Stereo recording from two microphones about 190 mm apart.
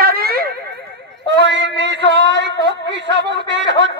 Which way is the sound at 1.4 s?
65° right (ahead or behind).